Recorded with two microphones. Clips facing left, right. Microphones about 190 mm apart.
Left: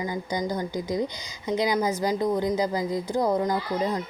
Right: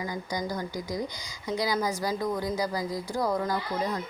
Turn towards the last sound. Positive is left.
turn(degrees=20)  # may be behind; listen again after turning